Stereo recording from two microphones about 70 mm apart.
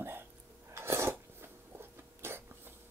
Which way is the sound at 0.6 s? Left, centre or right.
Right.